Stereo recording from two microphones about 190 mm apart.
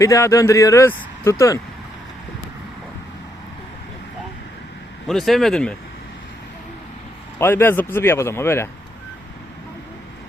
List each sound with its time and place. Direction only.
0.0 s speech: 15° left (ahead or behind)
5.0 s speech: centre (ahead or behind)
7.3 s speech: 10° left (ahead or behind)